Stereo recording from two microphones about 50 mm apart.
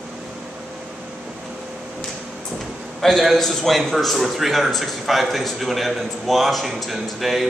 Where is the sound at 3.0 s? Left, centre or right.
Centre.